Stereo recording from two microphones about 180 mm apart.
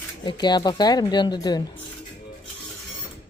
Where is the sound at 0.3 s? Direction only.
25° left (ahead or behind).